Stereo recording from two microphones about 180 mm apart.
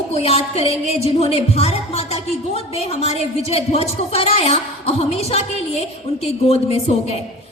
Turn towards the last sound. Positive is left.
turn(degrees=35)  # may be behind; listen again after turning